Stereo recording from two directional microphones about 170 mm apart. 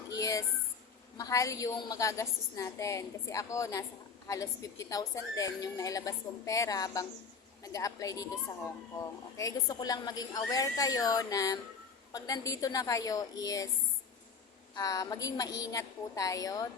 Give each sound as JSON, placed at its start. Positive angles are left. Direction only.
{"t": 0.1, "sound": "a sound", "side_deg": 20}
{"t": 1.1, "sound": "a woman's voice", "side_deg": 20}
{"t": 14.8, "sound": "a woman's voice", "side_deg": 20}